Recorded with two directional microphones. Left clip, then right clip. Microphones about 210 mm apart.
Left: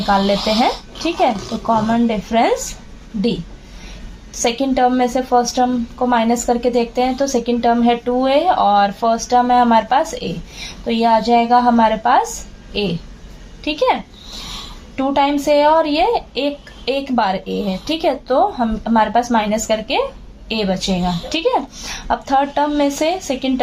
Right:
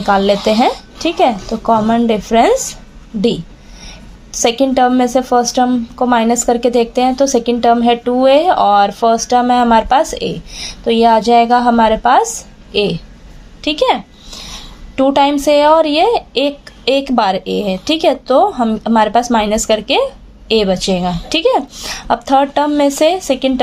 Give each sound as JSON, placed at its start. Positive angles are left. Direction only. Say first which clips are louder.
{"t": 0.0, "sound": "a woman's voice", "louder": "right 4 dB", "side_deg": -45}
{"t": 4.3, "sound": "a woman's voice", "louder": "right 5 dB", "side_deg": -45}